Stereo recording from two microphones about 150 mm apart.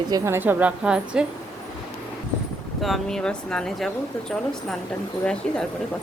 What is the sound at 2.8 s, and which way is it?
Speech, centre (ahead or behind).